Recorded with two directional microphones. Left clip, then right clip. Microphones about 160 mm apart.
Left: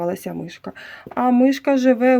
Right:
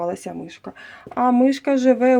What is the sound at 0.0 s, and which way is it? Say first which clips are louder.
Speech: left 1 dB; 25° left (ahead or behind).